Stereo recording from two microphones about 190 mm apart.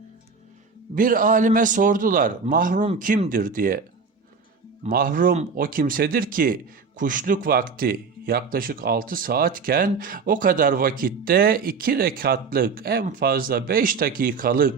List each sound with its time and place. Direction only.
0.9 s speech: 45° right (ahead or behind)
4.9 s speech: 50° right (ahead or behind)